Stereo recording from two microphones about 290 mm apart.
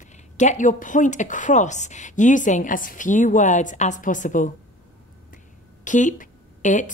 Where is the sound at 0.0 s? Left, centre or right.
Left.